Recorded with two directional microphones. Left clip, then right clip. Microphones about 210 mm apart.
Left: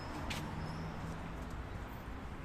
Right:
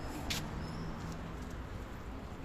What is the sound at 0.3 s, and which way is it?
Vehicle, 50° right (ahead or behind).